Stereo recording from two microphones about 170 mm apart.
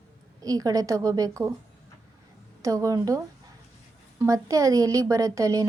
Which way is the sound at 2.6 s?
20° right (ahead or behind).